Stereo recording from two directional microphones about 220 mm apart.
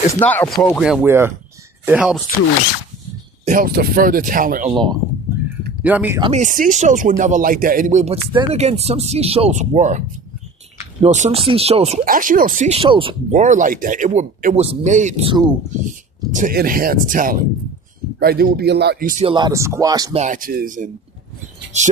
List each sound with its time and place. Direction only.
0.1 s speech: 10° left (ahead or behind); by 2.1 s 5° right (ahead or behind)
3.4 s speech: 40° right (ahead or behind)
4.7 s speech: 20° right (ahead or behind)
5.3 s a sound: 10° right (ahead or behind)
5.8 s speech: 5° right (ahead or behind)
6.1 s speech: 20° right (ahead or behind)
6.4 s speech: 35° right (ahead or behind)
11.0 s speech: 30° right (ahead or behind)
12.0 s speech: 40° right (ahead or behind); by 15.5 s 20° right (ahead or behind)
15.8 s speech: 35° right (ahead or behind)
19.2 s speech: 20° right (ahead or behind)
20.1 s speech: 35° right (ahead or behind)